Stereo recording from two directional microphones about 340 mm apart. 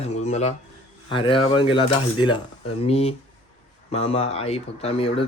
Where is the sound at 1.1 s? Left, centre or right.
Centre.